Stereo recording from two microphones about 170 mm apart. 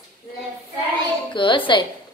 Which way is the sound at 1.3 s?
30° left (ahead or behind).